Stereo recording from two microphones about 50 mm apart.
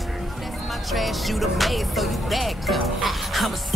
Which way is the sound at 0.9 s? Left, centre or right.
Centre.